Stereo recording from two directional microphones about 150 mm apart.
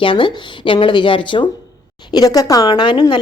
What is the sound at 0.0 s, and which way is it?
A woman's voice, 35° left (ahead or behind).